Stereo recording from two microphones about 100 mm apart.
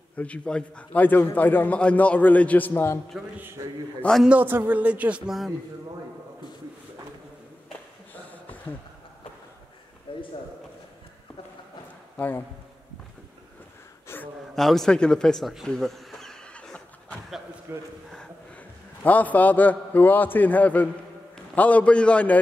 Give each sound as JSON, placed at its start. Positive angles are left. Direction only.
{"t": 0.2, "sound": "a man's voice", "side_deg": 10}
{"t": 3.3, "sound": "a man's voice", "side_deg": -20}
{"t": 10.1, "sound": "a sound", "side_deg": 60}
{"t": 12.2, "sound": "a man's voice", "side_deg": 20}
{"t": 14.0, "sound": "gasp", "side_deg": 20}
{"t": 14.5, "sound": "a sound", "side_deg": 5}
{"t": 17.7, "sound": "a man's voice", "side_deg": -25}
{"t": 19.0, "sound": "a man's voice", "side_deg": 15}